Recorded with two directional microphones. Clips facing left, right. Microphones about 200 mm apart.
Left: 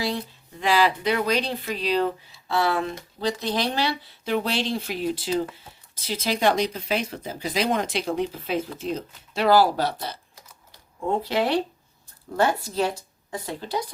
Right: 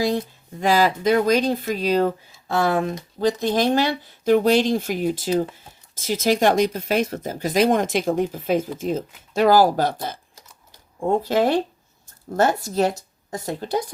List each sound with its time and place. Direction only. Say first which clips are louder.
0.6 s speech: right 3 dB; 45° right (ahead or behind)
11.2 s speech: right 3 dB; 45° right (ahead or behind)